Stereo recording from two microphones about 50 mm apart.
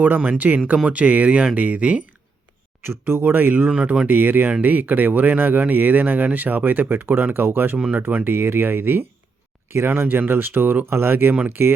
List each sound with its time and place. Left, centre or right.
0.3 s speech: right
2.8 s speech: right
3.7 s speech: right
4.0 s speech: right
9.6 s speech: right
9.9 s speech: right